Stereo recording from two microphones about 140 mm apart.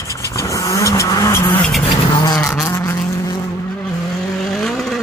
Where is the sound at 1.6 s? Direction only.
5° left (ahead or behind).